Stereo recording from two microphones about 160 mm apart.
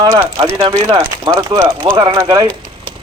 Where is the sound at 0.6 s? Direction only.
30° right (ahead or behind).